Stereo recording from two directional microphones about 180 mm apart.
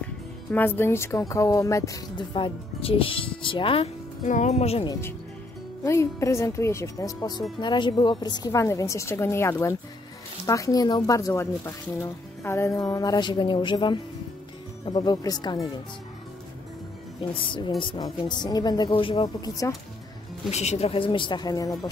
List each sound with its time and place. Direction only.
0.5 s speech: 10° left (ahead or behind); by 4.8 s 35° left (ahead or behind)
5.9 s a woman's voice: 15° left (ahead or behind)
17.3 s speech: 30° left (ahead or behind)
20.4 s speech: 35° left (ahead or behind); by 21.9 s 20° left (ahead or behind)